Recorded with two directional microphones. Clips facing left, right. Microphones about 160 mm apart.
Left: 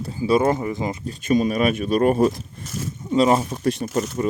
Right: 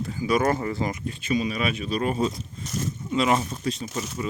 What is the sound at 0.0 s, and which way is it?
Speech, 30° left (ahead or behind).